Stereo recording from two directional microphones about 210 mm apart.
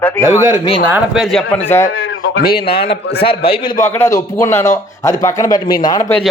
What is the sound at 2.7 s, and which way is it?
Speech, 50° left (ahead or behind).